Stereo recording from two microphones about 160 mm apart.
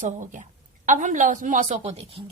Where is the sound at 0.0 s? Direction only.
50° right (ahead or behind).